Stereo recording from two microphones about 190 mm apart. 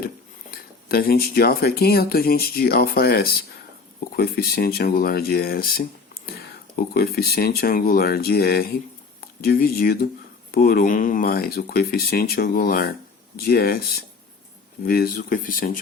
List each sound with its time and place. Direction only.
0.5 s speech: 50° left (ahead or behind)